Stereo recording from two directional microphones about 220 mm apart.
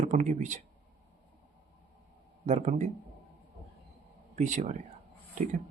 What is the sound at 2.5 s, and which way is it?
Speech, 30° right (ahead or behind).